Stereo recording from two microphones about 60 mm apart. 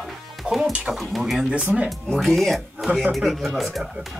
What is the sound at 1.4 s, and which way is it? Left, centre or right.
Speech, centre.